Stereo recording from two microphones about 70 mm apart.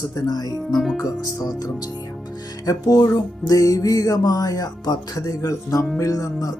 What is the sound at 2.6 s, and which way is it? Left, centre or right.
Speech, left.